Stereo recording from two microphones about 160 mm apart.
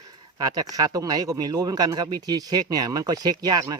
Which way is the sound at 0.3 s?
25° right (ahead or behind).